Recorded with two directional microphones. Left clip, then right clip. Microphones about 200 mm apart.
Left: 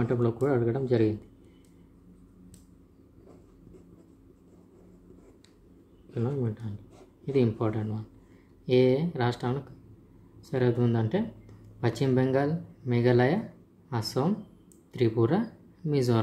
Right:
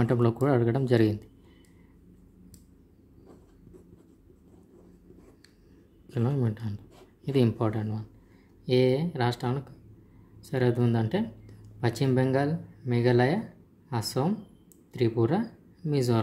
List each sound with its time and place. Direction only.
0.0 s speech: 30° right (ahead or behind)
6.0 s speech: 30° right (ahead or behind); by 16.2 s 5° right (ahead or behind)